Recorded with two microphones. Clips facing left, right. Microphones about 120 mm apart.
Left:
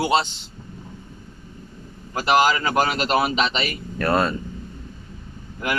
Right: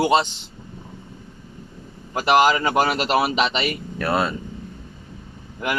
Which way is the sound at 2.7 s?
5° right (ahead or behind).